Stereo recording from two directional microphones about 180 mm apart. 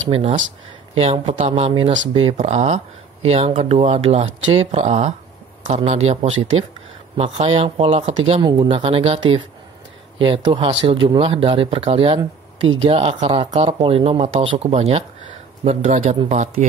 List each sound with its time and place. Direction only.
0.1 s speech: 35° right (ahead or behind)
6.3 s speech: 90° right
7.2 s speech: 35° right (ahead or behind)
12.5 s speech: 90° right
12.8 s speech: 30° right (ahead or behind)